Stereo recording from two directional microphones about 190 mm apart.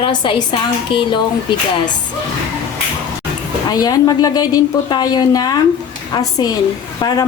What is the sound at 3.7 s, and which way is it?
A woman's voice, 20° left (ahead or behind).